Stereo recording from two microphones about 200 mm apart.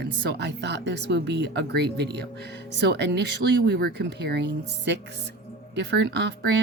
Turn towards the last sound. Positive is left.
turn(degrees=-60)  # may be behind; listen again after turning